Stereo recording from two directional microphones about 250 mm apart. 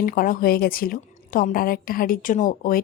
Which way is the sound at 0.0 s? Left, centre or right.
Left.